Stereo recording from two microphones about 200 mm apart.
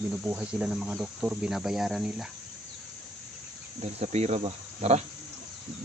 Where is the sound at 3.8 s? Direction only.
35° right (ahead or behind).